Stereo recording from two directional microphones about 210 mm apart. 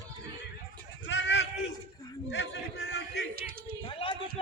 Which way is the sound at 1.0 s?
60° left (ahead or behind).